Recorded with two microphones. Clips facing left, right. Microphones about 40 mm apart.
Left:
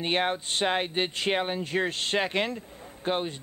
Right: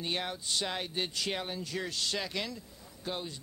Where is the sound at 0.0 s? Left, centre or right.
Left.